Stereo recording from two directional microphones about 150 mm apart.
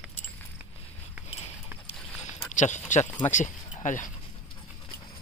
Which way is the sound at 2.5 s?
50° left (ahead or behind).